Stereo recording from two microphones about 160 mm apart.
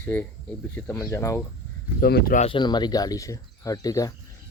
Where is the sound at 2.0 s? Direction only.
70° left (ahead or behind).